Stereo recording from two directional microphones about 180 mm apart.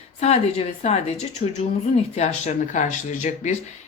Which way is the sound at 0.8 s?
40° left (ahead or behind).